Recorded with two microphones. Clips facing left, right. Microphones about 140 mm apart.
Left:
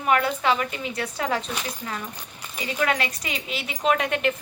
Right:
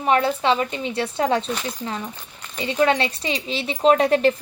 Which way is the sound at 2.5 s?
30° right (ahead or behind).